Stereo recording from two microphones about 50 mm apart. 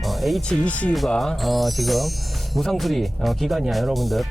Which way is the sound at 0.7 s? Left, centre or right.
Left.